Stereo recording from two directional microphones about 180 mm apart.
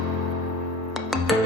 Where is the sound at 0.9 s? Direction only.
Centre (ahead or behind).